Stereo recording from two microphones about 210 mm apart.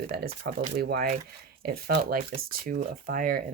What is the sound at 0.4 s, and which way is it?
Speech, 50° right (ahead or behind).